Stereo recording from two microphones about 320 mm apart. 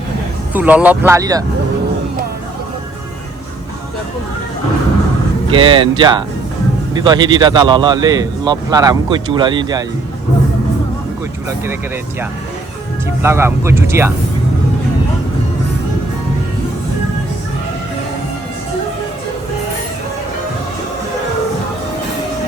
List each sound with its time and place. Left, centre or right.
0.5 s speech: centre
5.5 s speech: centre
11.4 s speech: centre
13.2 s speech: centre